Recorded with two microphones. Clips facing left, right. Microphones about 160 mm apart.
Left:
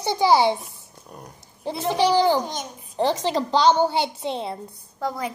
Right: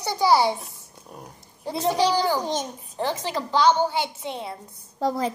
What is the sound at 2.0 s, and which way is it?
A woman's voice, 20° left (ahead or behind).